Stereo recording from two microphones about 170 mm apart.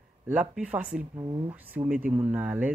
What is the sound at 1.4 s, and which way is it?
Speech, 10° right (ahead or behind).